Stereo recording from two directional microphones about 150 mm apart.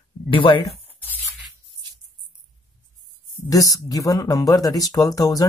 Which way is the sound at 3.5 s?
25° left (ahead or behind).